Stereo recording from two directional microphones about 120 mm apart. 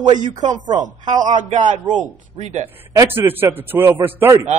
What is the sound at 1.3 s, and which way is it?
Speech, 90° right.